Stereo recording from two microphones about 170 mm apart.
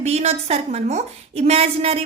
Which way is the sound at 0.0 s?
40° right (ahead or behind).